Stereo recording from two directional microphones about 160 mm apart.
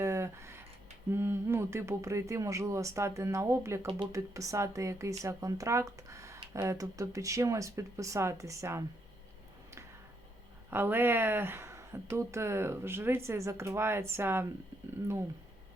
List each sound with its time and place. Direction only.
0.0 s a sound: 15° right (ahead or behind)
1.1 s speech: 15° right (ahead or behind)
10.7 s speech: 15° right (ahead or behind)